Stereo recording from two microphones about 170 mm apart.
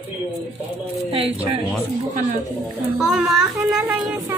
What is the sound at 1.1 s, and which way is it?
Speech, 35° right (ahead or behind).